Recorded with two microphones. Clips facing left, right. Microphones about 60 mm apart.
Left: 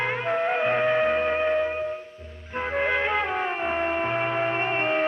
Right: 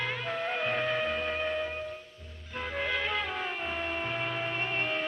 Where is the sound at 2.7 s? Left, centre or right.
Left.